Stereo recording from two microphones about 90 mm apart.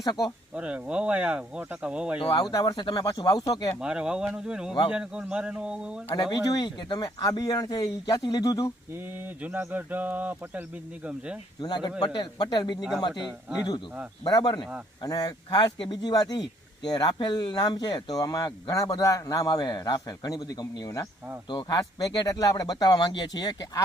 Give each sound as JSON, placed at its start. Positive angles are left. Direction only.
{"t": 0.0, "sound": "speech", "side_deg": 45}
{"t": 0.5, "sound": "speech", "side_deg": -15}
{"t": 2.3, "sound": "speech", "side_deg": 45}
{"t": 2.7, "sound": "speech", "side_deg": 60}
{"t": 3.0, "sound": "speech", "side_deg": 45}
{"t": 3.8, "sound": "speech", "side_deg": -10}
{"t": 6.1, "sound": "speech", "side_deg": 45}
{"t": 6.7, "sound": "speech", "side_deg": 60}
{"t": 8.9, "sound": "speech", "side_deg": -20}
{"t": 11.6, "sound": "speech", "side_deg": 50}
{"t": 13.2, "sound": "speech", "side_deg": -10}
{"t": 14.3, "sound": "speech", "side_deg": 50}